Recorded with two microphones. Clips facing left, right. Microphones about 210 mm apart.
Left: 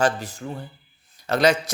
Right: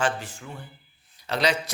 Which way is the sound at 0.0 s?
40° left (ahead or behind).